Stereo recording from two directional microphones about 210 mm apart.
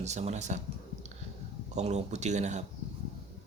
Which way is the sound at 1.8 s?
35° right (ahead or behind).